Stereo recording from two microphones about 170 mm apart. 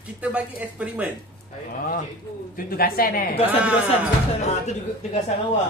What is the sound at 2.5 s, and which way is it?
Speech, 60° left (ahead or behind).